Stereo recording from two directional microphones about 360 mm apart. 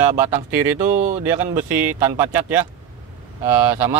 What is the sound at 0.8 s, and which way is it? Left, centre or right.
Speech, right.